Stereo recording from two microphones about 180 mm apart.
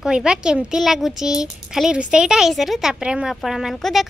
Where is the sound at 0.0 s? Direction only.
5° right (ahead or behind).